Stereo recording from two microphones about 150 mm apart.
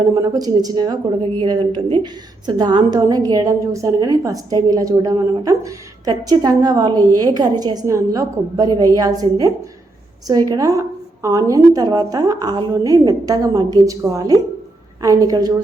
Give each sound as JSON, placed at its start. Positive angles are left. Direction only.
{"t": 0.1, "sound": "a woman's voice", "side_deg": -25}